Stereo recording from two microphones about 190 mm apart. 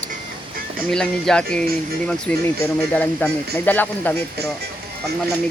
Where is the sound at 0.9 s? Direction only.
5° left (ahead or behind).